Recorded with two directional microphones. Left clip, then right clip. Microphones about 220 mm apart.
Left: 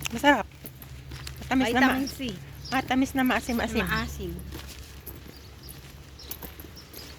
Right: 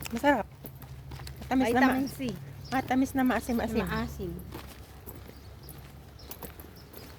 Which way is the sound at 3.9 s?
10° right (ahead or behind).